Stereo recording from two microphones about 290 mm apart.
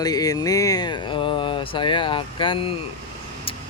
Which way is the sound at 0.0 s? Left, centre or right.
Centre.